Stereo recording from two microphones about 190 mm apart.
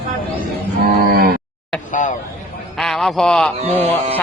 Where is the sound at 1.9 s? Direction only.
40° left (ahead or behind).